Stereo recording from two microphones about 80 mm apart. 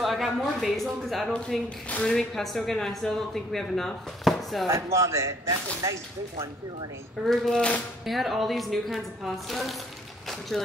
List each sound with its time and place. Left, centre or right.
0.0 s a woman's voice: centre
4.6 s speech: right
7.2 s speech: centre